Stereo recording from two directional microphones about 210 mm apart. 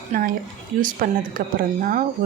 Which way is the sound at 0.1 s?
40° right (ahead or behind).